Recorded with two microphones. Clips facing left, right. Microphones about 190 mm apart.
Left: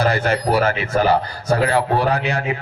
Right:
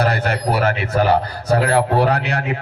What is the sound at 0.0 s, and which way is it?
A man's voice, 65° right (ahead or behind).